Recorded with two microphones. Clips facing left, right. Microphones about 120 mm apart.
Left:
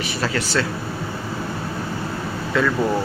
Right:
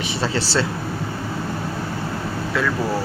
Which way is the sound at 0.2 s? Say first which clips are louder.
Even; 30° right (ahead or behind).